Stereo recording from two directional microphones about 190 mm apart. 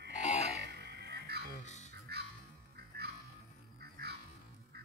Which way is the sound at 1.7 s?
35° left (ahead or behind).